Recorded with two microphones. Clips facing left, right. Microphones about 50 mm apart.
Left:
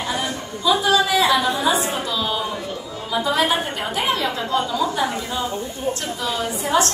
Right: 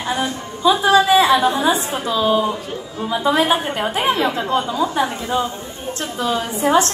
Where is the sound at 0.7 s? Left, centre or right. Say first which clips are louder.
Right 4 dB; right.